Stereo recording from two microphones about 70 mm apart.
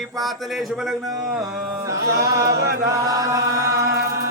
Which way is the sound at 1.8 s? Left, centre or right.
Right.